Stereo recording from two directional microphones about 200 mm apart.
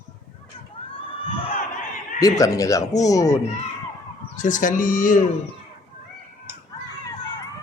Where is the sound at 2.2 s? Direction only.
15° left (ahead or behind).